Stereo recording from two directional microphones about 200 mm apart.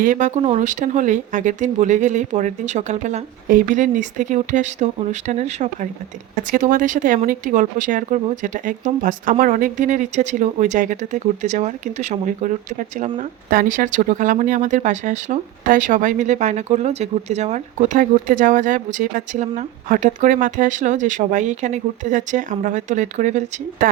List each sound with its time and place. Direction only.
0.0 s speech: 40° right (ahead or behind)